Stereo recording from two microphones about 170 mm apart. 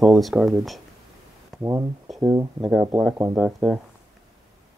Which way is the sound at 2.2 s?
20° right (ahead or behind).